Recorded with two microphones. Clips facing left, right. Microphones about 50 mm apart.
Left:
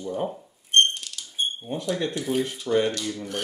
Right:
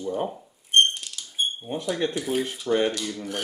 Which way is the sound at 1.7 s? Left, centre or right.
Centre.